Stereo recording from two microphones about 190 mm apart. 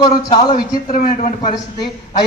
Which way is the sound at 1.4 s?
20° left (ahead or behind).